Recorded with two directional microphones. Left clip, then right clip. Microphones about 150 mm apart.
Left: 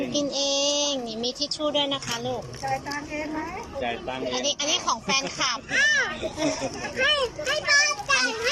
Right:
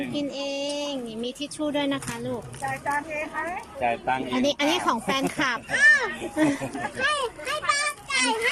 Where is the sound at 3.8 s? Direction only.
80° right.